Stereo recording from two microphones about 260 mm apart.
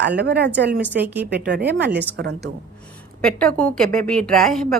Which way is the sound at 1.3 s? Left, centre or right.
Right.